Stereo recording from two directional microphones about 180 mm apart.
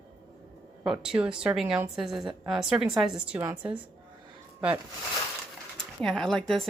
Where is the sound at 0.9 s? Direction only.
5° right (ahead or behind).